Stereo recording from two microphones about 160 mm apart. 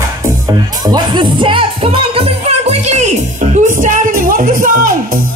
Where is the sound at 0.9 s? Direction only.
30° right (ahead or behind).